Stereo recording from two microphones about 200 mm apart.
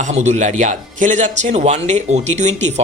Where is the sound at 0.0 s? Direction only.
35° right (ahead or behind).